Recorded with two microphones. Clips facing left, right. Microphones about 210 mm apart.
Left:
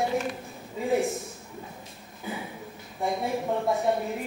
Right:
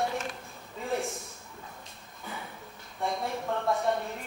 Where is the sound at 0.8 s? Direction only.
5° left (ahead or behind).